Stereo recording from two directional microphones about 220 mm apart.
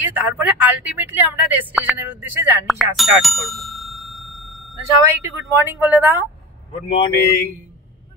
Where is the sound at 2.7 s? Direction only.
Centre (ahead or behind).